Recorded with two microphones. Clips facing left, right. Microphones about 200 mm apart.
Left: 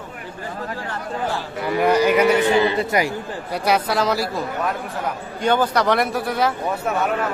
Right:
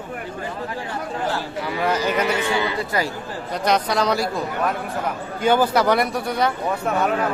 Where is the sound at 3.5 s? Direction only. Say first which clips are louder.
Even; 10° left (ahead or behind).